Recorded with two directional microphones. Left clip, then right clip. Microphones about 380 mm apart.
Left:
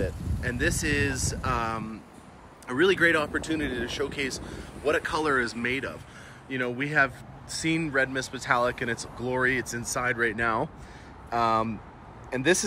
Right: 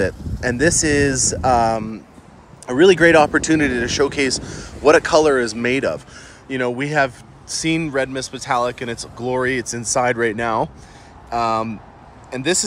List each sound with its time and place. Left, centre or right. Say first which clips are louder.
0.0 s speech: right 11 dB; centre